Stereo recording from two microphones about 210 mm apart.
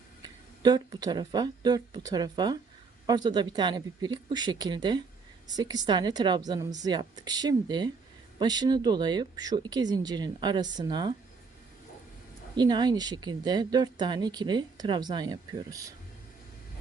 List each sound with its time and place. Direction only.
0.2 s speech: 20° right (ahead or behind)
12.5 s speech: 20° right (ahead or behind)